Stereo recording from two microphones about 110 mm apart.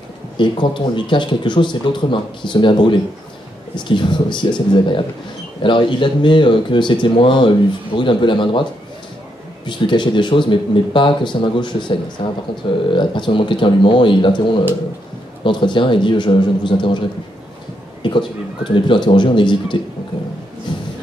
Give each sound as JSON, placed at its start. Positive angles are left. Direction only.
{"t": 0.4, "sound": "speech", "side_deg": 45}
{"t": 9.7, "sound": "speech", "side_deg": 45}
{"t": 15.4, "sound": "speech", "side_deg": 50}
{"t": 18.0, "sound": "speech", "side_deg": 45}
{"t": 20.7, "sound": "a sound", "side_deg": 50}